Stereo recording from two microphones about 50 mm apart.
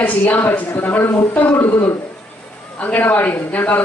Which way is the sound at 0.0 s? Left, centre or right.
Left.